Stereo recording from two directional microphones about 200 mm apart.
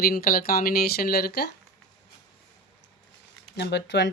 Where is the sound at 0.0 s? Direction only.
50° left (ahead or behind).